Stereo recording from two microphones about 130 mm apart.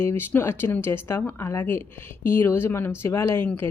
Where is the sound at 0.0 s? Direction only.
15° left (ahead or behind).